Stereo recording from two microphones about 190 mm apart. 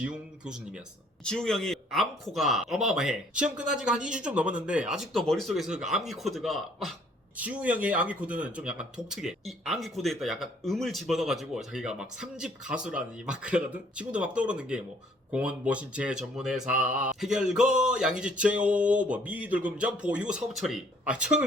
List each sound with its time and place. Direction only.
0.0 s speech: 5° right (ahead or behind)
18.2 s a sound: 5° right (ahead or behind)
19.1 s speech: 5° right (ahead or behind)